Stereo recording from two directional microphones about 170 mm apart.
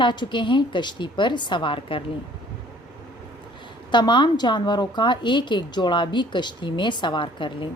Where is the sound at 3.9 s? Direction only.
25° left (ahead or behind).